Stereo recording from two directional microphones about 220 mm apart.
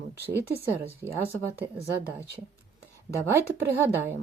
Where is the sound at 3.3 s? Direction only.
10° right (ahead or behind).